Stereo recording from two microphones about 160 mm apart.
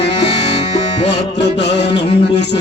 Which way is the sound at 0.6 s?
40° left (ahead or behind).